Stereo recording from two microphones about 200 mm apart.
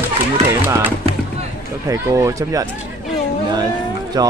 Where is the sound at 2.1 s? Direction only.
15° right (ahead or behind).